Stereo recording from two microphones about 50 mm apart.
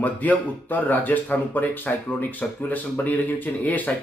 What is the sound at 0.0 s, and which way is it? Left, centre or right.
Speech, left.